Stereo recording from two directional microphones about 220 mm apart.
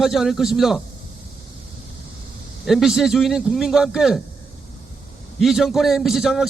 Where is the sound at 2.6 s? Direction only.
Centre (ahead or behind).